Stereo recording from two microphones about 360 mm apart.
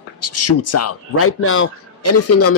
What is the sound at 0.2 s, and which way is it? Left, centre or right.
Speech, left.